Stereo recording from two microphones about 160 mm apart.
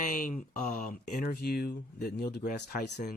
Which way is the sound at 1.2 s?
75° left (ahead or behind).